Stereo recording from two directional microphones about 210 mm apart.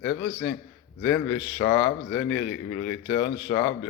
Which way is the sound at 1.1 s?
60° left (ahead or behind).